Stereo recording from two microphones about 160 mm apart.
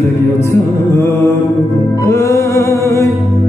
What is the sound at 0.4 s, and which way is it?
Music, 15° left (ahead or behind).